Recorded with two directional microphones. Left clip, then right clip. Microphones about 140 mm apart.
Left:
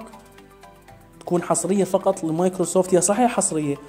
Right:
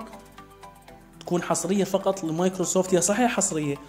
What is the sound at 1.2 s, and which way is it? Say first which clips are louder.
Speech: left 4 dB; 10° left (ahead or behind).